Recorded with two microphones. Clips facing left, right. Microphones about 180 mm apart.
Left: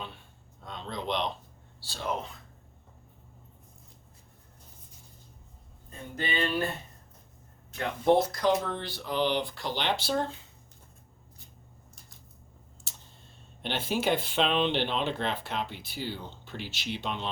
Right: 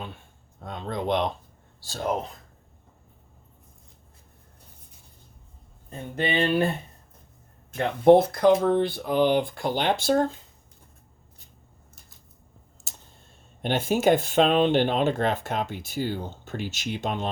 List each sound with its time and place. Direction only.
0.0 s a sound: 50° right (ahead or behind)
1.8 s speech: 45° right (ahead or behind)
5.9 s speech: 60° right (ahead or behind)
7.7 s speech: 55° right (ahead or behind)
13.6 s speech: 50° right (ahead or behind)